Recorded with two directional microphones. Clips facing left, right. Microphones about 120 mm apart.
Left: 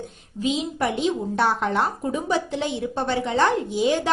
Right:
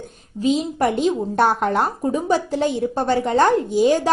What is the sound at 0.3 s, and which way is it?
A woman's voice, 40° right (ahead or behind).